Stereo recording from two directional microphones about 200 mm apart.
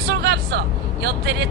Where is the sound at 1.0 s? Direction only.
55° right (ahead or behind).